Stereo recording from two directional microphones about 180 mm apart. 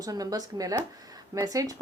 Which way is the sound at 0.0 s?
20° right (ahead or behind).